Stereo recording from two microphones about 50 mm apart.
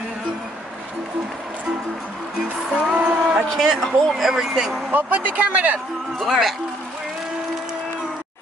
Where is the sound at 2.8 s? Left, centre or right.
Right.